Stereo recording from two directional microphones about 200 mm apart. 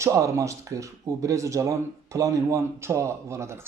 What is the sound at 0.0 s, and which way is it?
Speech, 15° right (ahead or behind).